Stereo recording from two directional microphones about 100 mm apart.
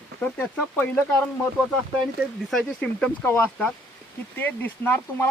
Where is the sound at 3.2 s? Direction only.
20° left (ahead or behind).